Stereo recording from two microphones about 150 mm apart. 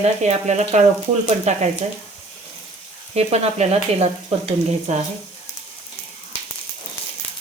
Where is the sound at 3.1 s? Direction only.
45° right (ahead or behind).